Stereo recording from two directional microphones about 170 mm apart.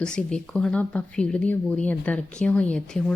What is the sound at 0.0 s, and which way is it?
Speech, 5° left (ahead or behind).